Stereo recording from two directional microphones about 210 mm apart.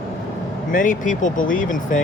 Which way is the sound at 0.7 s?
40° left (ahead or behind).